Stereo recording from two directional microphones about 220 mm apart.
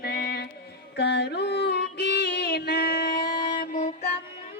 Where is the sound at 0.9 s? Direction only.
50° left (ahead or behind).